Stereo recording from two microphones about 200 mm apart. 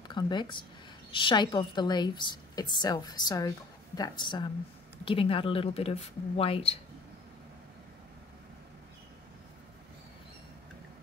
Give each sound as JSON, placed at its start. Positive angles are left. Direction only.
{"t": 0.1, "sound": "a woman's voice", "side_deg": 20}